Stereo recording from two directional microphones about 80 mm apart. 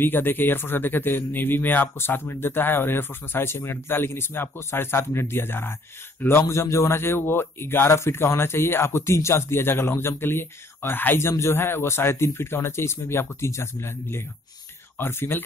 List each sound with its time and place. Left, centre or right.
0.0 s a man's voice: left